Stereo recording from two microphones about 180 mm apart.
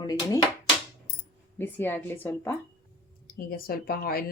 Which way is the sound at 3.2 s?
55° left (ahead or behind).